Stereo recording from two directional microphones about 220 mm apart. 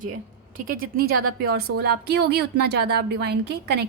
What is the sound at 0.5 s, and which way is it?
A woman's voice, 40° right (ahead or behind).